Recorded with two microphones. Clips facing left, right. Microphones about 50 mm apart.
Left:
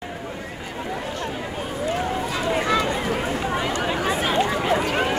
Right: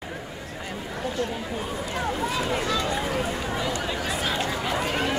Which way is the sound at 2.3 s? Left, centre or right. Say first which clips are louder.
Left 4 dB; left.